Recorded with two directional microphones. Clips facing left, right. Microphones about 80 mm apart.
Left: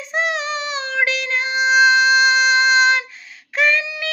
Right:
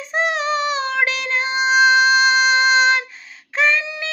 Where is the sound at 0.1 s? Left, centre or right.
Right.